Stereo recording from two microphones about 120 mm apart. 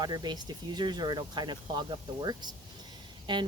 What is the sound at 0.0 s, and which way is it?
Speech, 35° right (ahead or behind).